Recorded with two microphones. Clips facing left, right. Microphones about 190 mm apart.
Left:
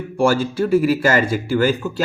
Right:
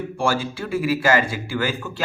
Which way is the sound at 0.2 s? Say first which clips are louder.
Left 7 dB; 45° left (ahead or behind).